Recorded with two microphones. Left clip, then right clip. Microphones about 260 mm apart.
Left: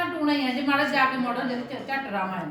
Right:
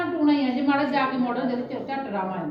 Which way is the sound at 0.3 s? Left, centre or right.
Left.